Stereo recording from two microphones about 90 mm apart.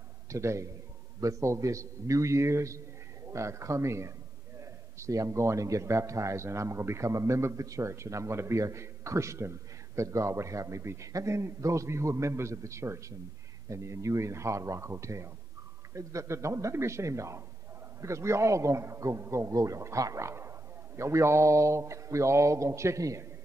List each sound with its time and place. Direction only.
0.3 s a man's voice: 35° right (ahead or behind)